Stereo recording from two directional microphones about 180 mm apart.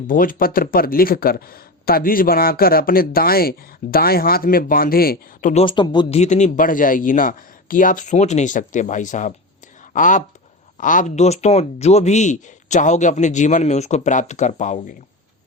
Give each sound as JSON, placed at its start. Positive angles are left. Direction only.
{"t": 0.1, "sound": "speech", "side_deg": 50}
{"t": 5.6, "sound": "speech", "side_deg": 25}
{"t": 6.1, "sound": "speech", "side_deg": 40}